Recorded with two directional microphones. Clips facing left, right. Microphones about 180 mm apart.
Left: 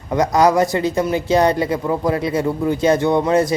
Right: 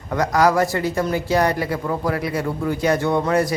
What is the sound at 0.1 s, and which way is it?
Speech, 20° left (ahead or behind).